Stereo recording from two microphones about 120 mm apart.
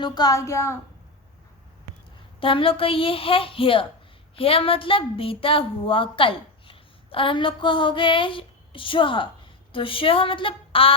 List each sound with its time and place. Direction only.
0.0 s a woman's voice: 35° left (ahead or behind)
2.4 s a woman's voice: 45° left (ahead or behind)